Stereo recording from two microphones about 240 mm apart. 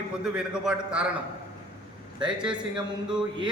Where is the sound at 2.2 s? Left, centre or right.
Centre.